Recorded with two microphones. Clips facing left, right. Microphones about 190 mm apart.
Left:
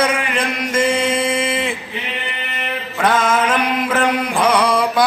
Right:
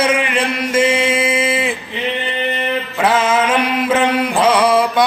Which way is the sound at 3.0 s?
10° right (ahead or behind).